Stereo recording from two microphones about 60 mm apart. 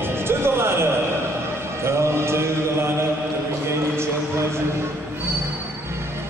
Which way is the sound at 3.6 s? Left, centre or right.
Right.